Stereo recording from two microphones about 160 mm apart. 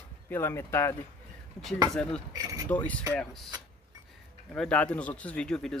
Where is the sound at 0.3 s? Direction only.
15° left (ahead or behind).